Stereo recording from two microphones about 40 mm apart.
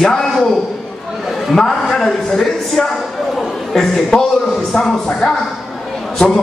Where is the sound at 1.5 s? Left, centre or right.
Centre.